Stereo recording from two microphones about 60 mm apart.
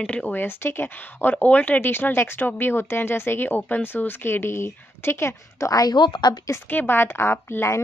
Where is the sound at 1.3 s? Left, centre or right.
Left.